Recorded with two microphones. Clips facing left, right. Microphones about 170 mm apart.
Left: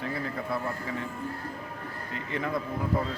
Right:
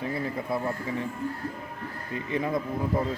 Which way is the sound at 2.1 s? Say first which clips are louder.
Right 4 dB; 20° right (ahead or behind).